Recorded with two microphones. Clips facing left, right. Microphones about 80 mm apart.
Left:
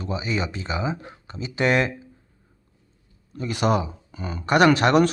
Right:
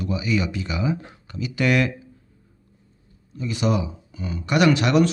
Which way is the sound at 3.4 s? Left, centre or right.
Left.